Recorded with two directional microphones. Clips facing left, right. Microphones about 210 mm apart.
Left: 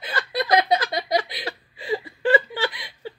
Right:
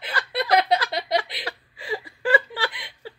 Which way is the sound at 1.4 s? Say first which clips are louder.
Left 2 dB; 20° left (ahead or behind).